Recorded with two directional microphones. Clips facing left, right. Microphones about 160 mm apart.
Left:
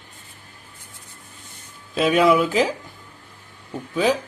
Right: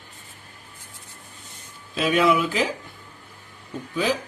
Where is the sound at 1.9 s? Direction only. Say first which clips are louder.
Left 3 dB; 40° left (ahead or behind).